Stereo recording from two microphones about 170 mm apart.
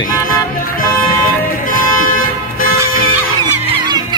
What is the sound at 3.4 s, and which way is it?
Music, 25° right (ahead or behind).